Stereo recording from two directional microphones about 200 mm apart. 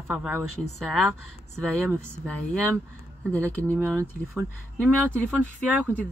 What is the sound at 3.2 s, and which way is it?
Speech, 5° left (ahead or behind).